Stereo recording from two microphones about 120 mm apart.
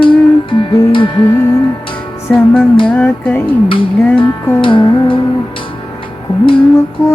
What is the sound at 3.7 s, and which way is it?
Music, 45° left (ahead or behind).